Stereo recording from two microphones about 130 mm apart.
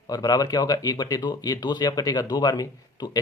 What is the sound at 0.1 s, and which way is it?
Speech, 30° left (ahead or behind).